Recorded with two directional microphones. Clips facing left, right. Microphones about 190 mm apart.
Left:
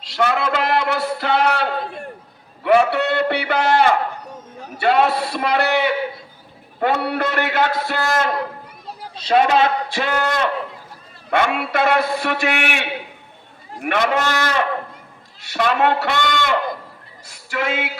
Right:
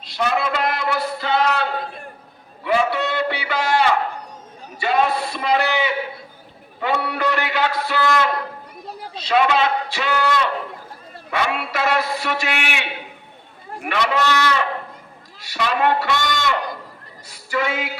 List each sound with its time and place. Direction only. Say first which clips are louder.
0.0 s a man's voice: left 2 dB; 70° left (ahead or behind); by 3.9 s 55° left (ahead or behind)
4.8 s a man's voice: left 3 dB; 65° left (ahead or behind)
6.7 s a man's voice: left 3 dB; 50° left (ahead or behind)